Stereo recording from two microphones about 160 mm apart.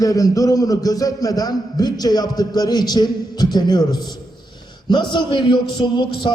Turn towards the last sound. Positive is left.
turn(degrees=30)  # may be behind; listen again after turning